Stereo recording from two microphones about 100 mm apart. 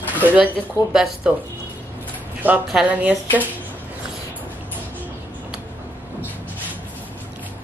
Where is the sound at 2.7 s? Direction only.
10° right (ahead or behind).